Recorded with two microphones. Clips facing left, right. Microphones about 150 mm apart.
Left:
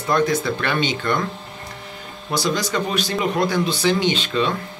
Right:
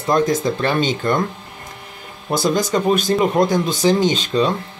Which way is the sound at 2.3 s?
50° right (ahead or behind).